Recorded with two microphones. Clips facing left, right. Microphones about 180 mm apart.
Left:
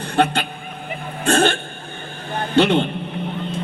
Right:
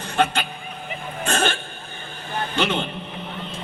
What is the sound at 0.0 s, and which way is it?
Vehicle, 60° left (ahead or behind).